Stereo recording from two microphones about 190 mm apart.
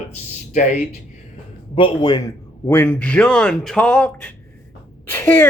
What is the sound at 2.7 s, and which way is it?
Speech, 10° left (ahead or behind).